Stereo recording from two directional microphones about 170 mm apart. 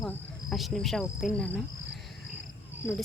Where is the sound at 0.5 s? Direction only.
Centre (ahead or behind).